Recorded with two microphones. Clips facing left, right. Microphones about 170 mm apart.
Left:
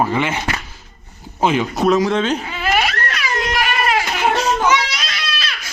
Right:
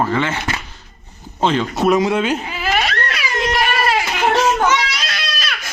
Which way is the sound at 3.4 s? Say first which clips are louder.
Right 3 dB; 30° right (ahead or behind).